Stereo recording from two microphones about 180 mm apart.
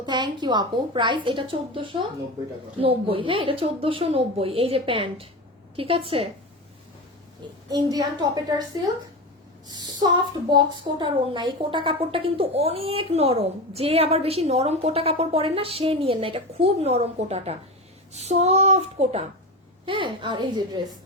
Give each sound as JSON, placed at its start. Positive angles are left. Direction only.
{"t": 0.0, "sound": "a woman's voice", "side_deg": -25}
{"t": 7.7, "sound": "a woman's voice", "side_deg": -20}